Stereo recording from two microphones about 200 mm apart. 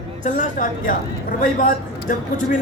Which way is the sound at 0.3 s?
40° left (ahead or behind).